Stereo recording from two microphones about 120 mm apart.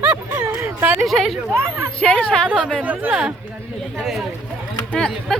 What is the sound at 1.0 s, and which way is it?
Speech, centre (ahead or behind).